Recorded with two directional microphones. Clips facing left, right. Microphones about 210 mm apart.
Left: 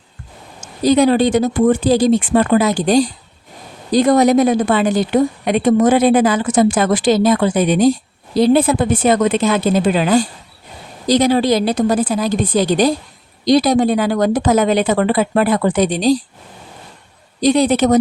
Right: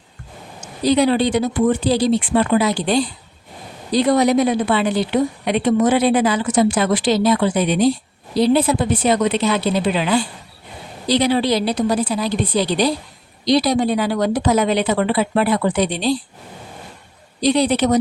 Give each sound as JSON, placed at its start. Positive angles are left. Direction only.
{"t": 0.9, "sound": "a woman's voice", "side_deg": 45}
{"t": 17.4, "sound": "a woman's voice", "side_deg": 45}